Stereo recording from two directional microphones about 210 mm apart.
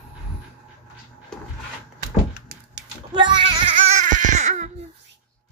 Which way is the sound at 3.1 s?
20° right (ahead or behind).